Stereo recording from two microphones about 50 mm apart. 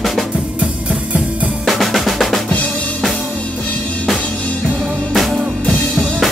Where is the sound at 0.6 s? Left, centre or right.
Right.